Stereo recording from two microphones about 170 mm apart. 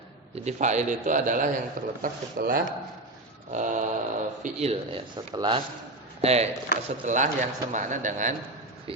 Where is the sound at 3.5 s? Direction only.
45° right (ahead or behind); by 5.6 s 25° right (ahead or behind).